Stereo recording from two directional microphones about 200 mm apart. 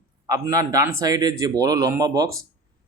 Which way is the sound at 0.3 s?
15° right (ahead or behind).